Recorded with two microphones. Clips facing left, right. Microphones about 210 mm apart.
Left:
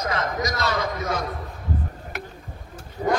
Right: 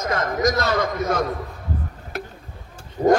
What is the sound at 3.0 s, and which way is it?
Dog, 45° right (ahead or behind).